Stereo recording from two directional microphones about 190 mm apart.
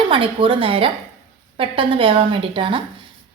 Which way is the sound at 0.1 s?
25° right (ahead or behind).